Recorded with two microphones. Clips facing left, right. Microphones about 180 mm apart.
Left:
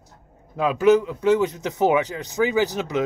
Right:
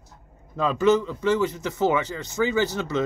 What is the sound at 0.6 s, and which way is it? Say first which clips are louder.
A man's voice: left 3 dB; 10° left (ahead or behind).